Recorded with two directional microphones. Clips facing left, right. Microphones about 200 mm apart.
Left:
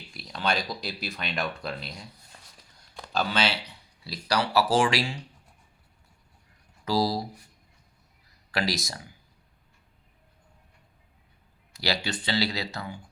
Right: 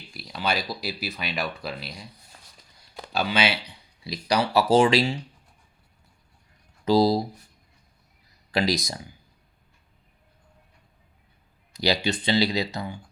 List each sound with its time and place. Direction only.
0.1 s speech: centre (ahead or behind); by 5.2 s 25° right (ahead or behind)
6.8 s speech: 20° right (ahead or behind)
8.5 s speech: 20° right (ahead or behind)
11.7 s speech: 20° right (ahead or behind)